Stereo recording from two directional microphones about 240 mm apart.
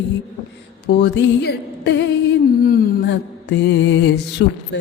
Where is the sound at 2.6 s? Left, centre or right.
Left.